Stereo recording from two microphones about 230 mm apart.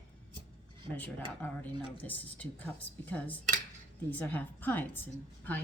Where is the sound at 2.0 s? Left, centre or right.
Centre.